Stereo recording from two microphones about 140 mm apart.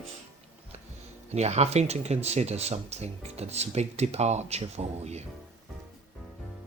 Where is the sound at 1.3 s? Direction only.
50° right (ahead or behind).